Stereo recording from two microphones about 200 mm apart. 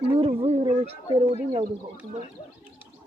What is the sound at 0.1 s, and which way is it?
Speech, 30° right (ahead or behind).